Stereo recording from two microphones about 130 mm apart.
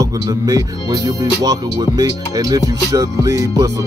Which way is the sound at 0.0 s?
30° right (ahead or behind).